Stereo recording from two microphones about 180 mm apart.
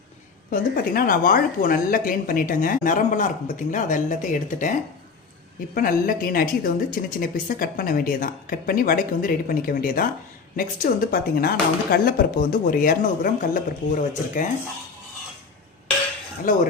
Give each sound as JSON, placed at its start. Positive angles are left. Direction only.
{"t": 0.5, "sound": "speech", "side_deg": 50}